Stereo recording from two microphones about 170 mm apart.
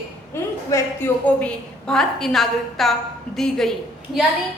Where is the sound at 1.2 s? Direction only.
5° left (ahead or behind).